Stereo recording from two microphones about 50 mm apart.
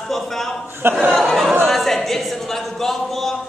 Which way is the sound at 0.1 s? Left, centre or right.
Centre.